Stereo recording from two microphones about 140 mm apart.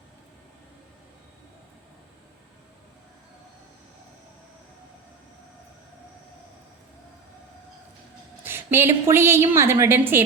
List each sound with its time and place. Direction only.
8.4 s a woman's voice: 15° right (ahead or behind)